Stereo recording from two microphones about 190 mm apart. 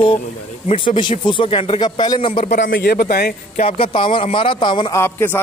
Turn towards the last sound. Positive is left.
turn(degrees=10)  # may be behind; listen again after turning